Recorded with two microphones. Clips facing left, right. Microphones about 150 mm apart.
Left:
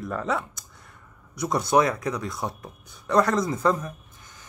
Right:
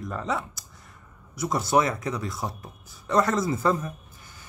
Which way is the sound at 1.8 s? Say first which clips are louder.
Left 3 dB; 25° right (ahead or behind).